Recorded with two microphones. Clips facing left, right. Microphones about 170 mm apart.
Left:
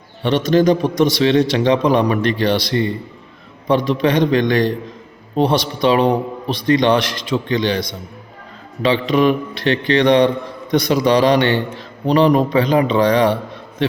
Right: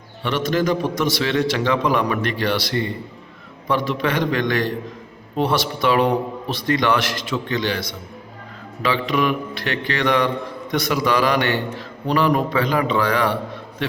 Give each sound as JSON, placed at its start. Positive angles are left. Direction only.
{"t": 0.3, "sound": "a man's voice", "side_deg": 25}